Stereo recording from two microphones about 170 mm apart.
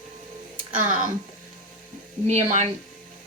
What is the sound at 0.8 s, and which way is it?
Speech, 50° right (ahead or behind).